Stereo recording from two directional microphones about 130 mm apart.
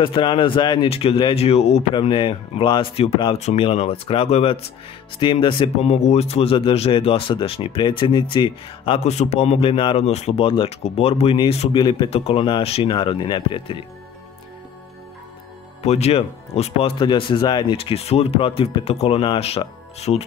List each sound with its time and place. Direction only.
0.0 s speech: 40° left (ahead or behind)
0.8 s speech: 50° left (ahead or behind)
9.0 s speech: 60° left (ahead or behind); by 10.0 s 40° left (ahead or behind)
10.0 s speech: 55° left (ahead or behind)
11.7 s speech: 35° left (ahead or behind)
12.8 s speech: 35° left (ahead or behind)
15.8 s speech: 55° left (ahead or behind); by 17.7 s 35° left (ahead or behind)
17.7 s speech: 50° left (ahead or behind)